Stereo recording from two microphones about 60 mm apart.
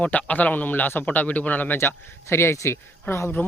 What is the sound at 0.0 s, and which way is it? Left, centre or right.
Speech, left.